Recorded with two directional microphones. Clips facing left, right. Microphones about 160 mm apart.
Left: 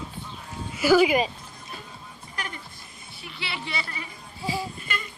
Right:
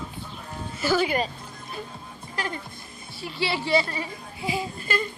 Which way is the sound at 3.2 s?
30° right (ahead or behind).